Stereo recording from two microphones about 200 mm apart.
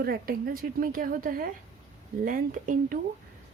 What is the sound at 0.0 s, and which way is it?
A woman's voice, 50° right (ahead or behind).